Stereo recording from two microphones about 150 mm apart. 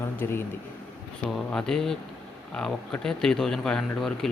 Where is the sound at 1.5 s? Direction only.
5° left (ahead or behind).